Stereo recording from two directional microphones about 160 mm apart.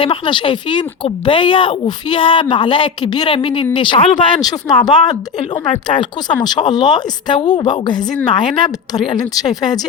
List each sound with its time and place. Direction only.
0.0 s speech: 30° left (ahead or behind)